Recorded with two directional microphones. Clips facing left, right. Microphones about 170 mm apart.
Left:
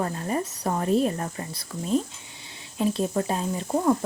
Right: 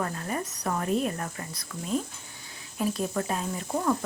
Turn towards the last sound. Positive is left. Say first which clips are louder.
# left 5 dB
turn(degrees=25)  # may be behind; listen again after turning